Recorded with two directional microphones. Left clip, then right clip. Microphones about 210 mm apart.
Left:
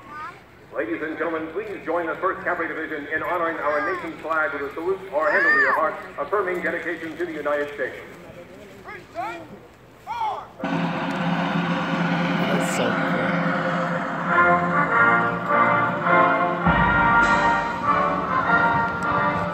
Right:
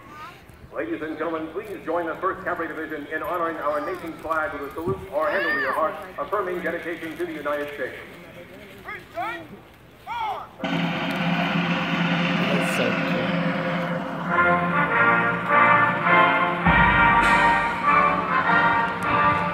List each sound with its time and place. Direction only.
0.7 s speech: 45° right (ahead or behind)
9.2 s speech: 5° right (ahead or behind)
10.6 s vehicle: 20° right (ahead or behind)
13.7 s music: 20° right (ahead or behind)
18.3 s music: 10° right (ahead or behind)